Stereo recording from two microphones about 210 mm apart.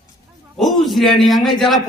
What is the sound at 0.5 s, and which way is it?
A man's voice, centre (ahead or behind).